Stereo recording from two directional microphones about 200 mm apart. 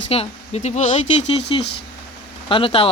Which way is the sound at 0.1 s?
30° left (ahead or behind).